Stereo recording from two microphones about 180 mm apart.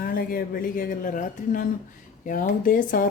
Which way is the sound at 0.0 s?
55° left (ahead or behind).